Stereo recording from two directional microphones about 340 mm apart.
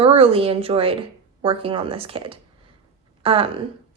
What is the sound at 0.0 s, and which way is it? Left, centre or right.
A woman's voice, centre.